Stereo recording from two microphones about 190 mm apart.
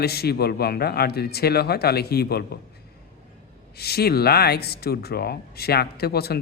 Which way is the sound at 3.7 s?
55° left (ahead or behind).